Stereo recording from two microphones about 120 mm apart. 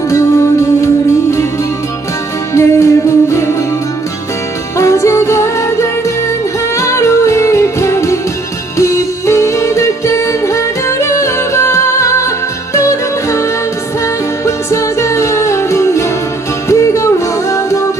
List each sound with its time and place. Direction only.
2.5 s music: 25° left (ahead or behind)
4.7 s music: 25° left (ahead or behind)